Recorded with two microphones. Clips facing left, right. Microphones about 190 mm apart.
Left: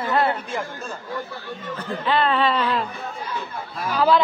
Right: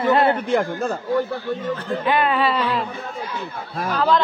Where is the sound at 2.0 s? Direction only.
15° right (ahead or behind).